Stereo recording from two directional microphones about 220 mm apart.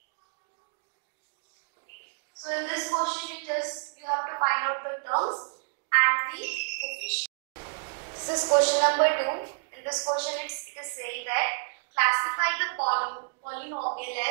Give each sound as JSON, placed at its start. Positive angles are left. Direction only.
{"t": 2.4, "sound": "a woman's voice", "side_deg": -20}
{"t": 5.9, "sound": "fire alarm", "side_deg": -15}
{"t": 6.8, "sound": "a sound", "side_deg": -50}
{"t": 8.3, "sound": "a woman's voice", "side_deg": -25}
{"t": 12.7, "sound": "a woman's voice", "side_deg": -25}